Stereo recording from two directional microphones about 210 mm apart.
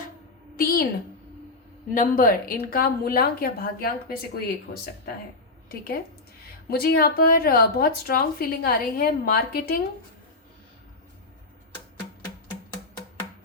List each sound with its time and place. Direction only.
0.5 s a woman's voice: 45° left (ahead or behind)
1.9 s a woman's voice: 40° left (ahead or behind)